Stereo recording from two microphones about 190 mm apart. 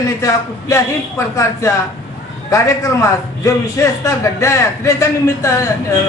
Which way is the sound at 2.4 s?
15° left (ahead or behind).